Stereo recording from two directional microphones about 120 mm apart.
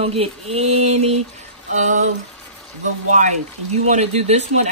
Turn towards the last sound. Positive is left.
turn(degrees=-65)  # may be behind; listen again after turning